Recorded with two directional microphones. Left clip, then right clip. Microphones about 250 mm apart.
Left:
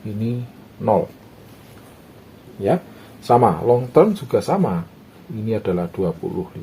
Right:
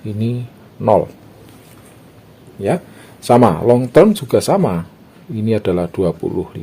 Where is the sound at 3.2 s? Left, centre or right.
Right.